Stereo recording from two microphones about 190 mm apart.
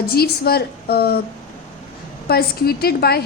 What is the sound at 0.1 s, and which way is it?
A woman's voice, 55° left (ahead or behind).